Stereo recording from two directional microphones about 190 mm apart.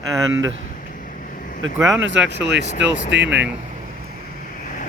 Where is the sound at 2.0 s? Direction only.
70° right (ahead or behind).